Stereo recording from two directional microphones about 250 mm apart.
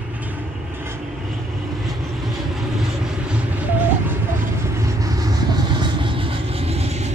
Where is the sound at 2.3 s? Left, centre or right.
Centre; by 7.1 s right.